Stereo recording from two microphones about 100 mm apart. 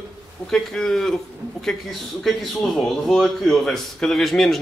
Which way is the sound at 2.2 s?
5° left (ahead or behind).